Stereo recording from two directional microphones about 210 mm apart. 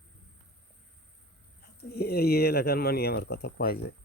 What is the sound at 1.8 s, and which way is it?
Speech, 50° left (ahead or behind).